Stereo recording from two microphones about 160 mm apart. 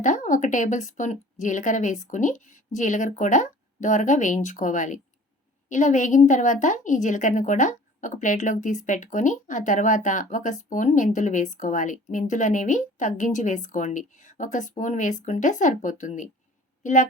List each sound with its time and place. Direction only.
0.0 s a woman's voice: 50° left (ahead or behind)